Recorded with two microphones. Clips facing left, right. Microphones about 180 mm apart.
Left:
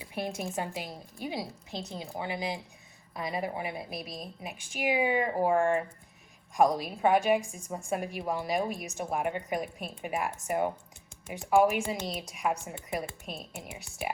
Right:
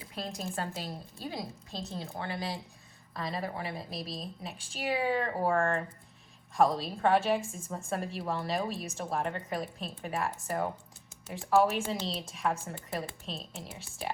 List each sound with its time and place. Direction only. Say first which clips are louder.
0.1 s a woman's voice: left 4 dB; 25° left (ahead or behind)